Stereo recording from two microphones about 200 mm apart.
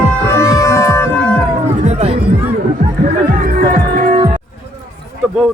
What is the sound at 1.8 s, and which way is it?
Music, 35° right (ahead or behind).